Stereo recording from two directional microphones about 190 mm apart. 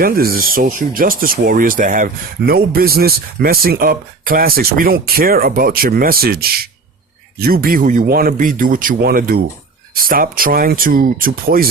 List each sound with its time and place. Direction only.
0.0 s speech: 50° right (ahead or behind)